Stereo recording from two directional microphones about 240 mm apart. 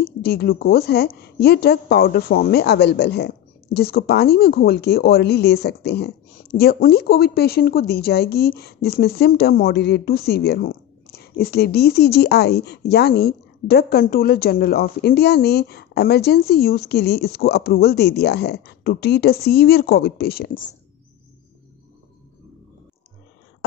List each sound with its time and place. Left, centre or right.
0.0 s a woman's voice: left